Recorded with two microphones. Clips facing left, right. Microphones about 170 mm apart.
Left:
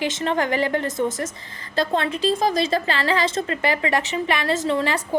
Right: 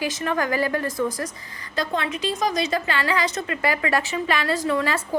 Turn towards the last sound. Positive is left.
turn(degrees=25)  # may be behind; listen again after turning